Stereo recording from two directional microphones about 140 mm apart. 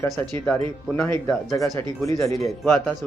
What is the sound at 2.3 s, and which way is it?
Speech, centre (ahead or behind).